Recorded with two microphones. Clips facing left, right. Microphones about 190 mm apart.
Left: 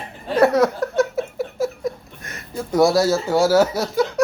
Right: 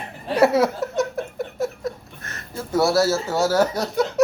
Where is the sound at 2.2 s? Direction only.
15° left (ahead or behind).